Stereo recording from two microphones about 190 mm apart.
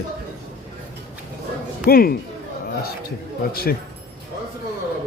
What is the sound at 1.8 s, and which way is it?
Speech, 55° left (ahead or behind).